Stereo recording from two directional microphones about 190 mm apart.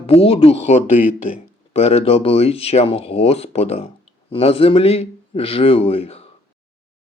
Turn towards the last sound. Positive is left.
turn(degrees=30)  # may be behind; listen again after turning